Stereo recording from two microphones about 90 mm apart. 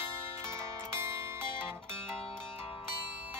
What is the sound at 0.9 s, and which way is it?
Music, 30° right (ahead or behind).